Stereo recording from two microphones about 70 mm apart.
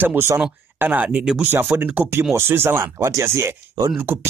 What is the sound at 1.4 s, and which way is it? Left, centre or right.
Speech, right.